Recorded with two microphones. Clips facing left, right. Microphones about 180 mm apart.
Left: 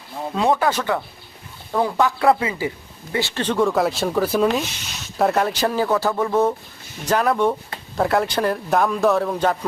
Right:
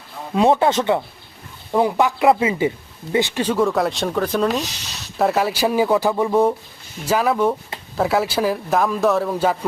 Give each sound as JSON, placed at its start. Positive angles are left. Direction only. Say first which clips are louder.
{"t": 0.3, "sound": "speech", "louder": "right 4 dB", "side_deg": -25}